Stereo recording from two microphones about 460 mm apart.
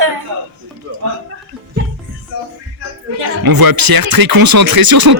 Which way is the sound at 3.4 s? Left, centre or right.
Right.